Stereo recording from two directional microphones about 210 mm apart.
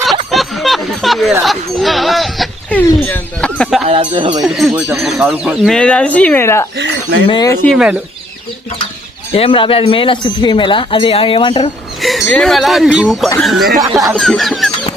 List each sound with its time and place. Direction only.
0.3 s goat: centre (ahead or behind)
3.0 s a sound: 5° left (ahead or behind)
3.8 s speech: 25° right (ahead or behind)
4.4 s speech: centre (ahead or behind)
6.7 s a sound: 55° right (ahead or behind)
7.3 s speech: 20° left (ahead or behind)
9.3 s speech: 25° left (ahead or behind)
11.9 s a sound: centre (ahead or behind)
12.3 s speech: centre (ahead or behind)
13.7 s speech: 15° right (ahead or behind)
14.0 s speech: centre (ahead or behind)